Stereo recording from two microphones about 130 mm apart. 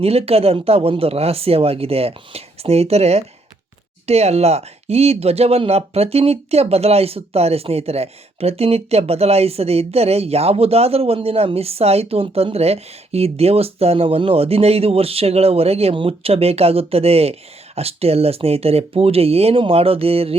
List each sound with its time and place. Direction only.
0.0 s speech: 50° right (ahead or behind)